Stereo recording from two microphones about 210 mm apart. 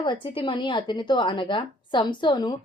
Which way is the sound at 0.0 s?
25° left (ahead or behind).